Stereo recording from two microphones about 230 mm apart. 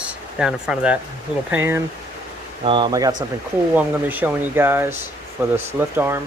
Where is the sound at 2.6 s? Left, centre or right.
Right.